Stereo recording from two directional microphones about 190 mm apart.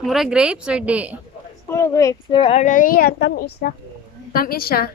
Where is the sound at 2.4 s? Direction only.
35° left (ahead or behind); by 4.9 s 50° left (ahead or behind).